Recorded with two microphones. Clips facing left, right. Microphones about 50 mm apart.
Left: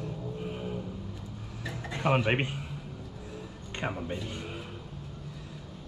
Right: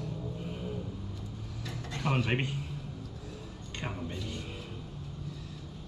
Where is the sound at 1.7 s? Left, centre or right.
Left.